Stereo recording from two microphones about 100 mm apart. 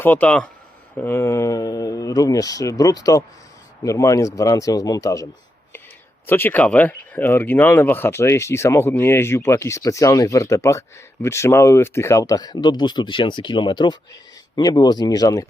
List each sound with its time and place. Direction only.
0.0 s speech: 15° left (ahead or behind)
0.9 s speech: 25° left (ahead or behind)
6.2 s speech: 20° left (ahead or behind); by 15.4 s 35° left (ahead or behind)